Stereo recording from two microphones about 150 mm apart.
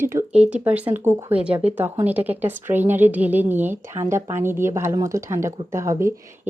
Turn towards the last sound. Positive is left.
turn(degrees=-20)  # may be behind; listen again after turning